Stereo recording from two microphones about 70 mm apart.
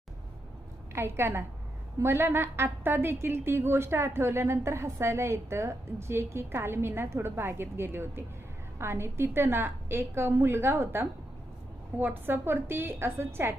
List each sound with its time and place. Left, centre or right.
0.9 s a woman's voice: right